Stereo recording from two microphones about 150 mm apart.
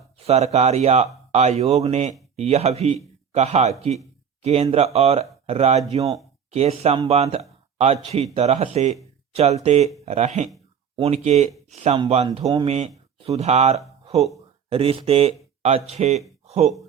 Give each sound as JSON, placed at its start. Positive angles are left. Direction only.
{"t": 0.2, "sound": "speech", "side_deg": -45}